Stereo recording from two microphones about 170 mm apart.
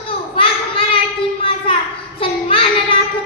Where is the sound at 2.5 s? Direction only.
35° left (ahead or behind).